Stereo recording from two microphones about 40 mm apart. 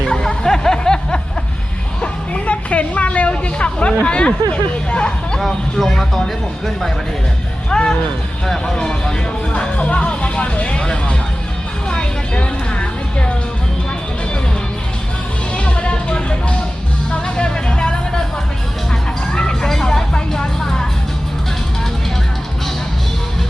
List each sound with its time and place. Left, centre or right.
0.1 s music: centre
2.0 s music: left
4.9 s a sound: left
5.4 s speech: centre
7.7 s speech: left
9.5 s music: left
11.9 s music: left
15.5 s music: left
19.3 s music: centre